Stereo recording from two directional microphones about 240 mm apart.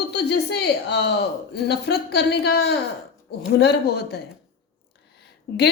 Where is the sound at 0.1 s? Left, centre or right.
Left.